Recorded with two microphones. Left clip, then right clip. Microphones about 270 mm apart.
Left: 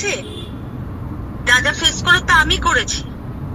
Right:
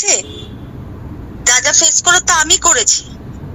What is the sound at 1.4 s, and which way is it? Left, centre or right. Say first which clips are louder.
A woman's voice: right 2 dB; right.